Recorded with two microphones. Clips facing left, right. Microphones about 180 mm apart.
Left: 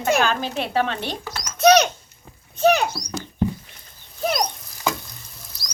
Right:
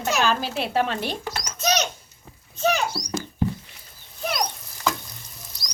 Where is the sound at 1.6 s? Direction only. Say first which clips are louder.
Left 10 dB; 60° left (ahead or behind).